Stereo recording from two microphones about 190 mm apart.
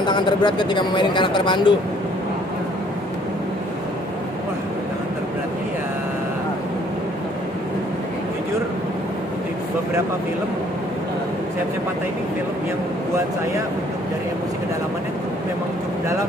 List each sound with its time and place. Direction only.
0.0 s speech: 25° left (ahead or behind)